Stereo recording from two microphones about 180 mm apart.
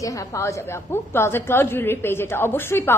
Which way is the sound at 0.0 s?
20° left (ahead or behind).